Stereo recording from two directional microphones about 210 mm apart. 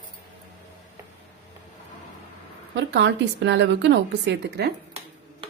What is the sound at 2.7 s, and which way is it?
A woman's voice, 55° right (ahead or behind).